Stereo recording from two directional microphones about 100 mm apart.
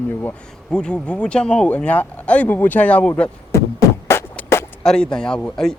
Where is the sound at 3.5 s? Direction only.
25° left (ahead or behind).